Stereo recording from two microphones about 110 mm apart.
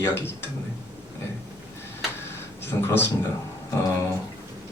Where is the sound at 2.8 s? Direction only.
20° left (ahead or behind).